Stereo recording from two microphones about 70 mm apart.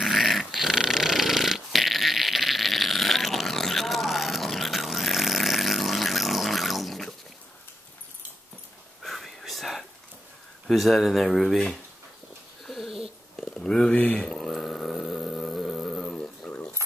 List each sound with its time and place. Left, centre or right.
0.0 s dog: centre
9.0 s whispering: centre
10.7 s speech: centre
12.6 s dog: centre
13.6 s speech: centre
14.4 s a sound: centre
16.4 s a sound: centre